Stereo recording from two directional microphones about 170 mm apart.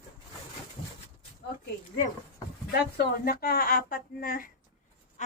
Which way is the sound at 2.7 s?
65° left (ahead or behind).